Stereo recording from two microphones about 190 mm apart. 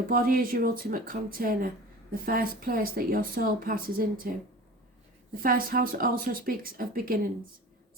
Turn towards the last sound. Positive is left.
turn(degrees=-50)  # may be behind; listen again after turning